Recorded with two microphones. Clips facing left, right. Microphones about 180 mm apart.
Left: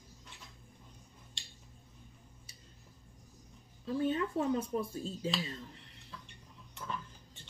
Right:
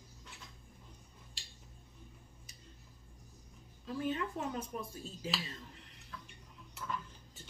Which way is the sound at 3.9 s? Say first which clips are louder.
Left 4 dB; 30° left (ahead or behind).